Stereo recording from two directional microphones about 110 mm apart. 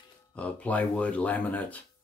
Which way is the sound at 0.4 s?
15° left (ahead or behind).